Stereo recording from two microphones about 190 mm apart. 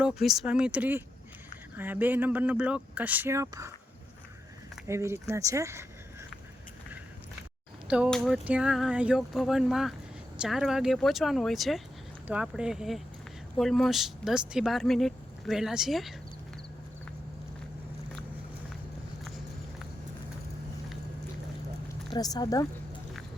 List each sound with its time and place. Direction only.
0.0 s speech: centre (ahead or behind)
4.9 s speech: 15° right (ahead or behind)
7.9 s speech: 5° right (ahead or behind)
22.1 s speech: 20° left (ahead or behind)